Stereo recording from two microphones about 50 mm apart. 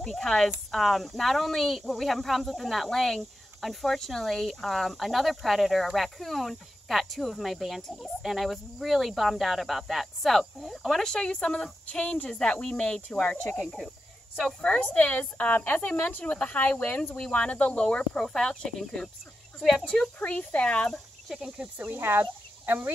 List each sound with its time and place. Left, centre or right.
0.0 s speech: centre
10.9 s speech: centre
13.6 s speech: centre
14.6 s speech: left
16.3 s speech: left
16.5 s speech: left
17.2 s speech: left
17.7 s speech: centre
20.2 s speech: left
21.4 s speech: centre
21.7 s speech: right